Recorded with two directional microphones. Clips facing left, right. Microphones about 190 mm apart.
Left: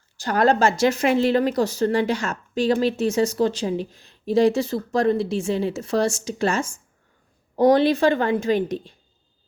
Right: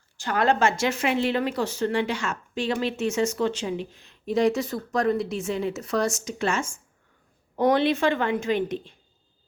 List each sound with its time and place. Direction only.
0.2 s speech: 40° left (ahead or behind)